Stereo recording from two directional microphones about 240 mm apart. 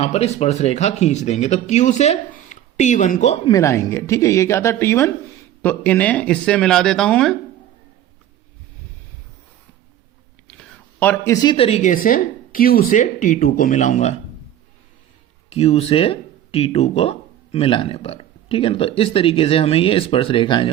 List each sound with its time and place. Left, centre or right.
0.0 s speech: left
3.5 s a woman's voice: centre
10.4 s speech: centre; by 14.2 s left
15.5 s speech: left